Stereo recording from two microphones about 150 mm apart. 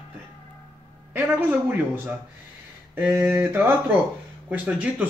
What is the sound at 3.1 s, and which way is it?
Speech, 15° right (ahead or behind).